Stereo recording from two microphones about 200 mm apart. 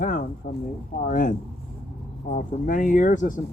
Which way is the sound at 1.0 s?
40° left (ahead or behind).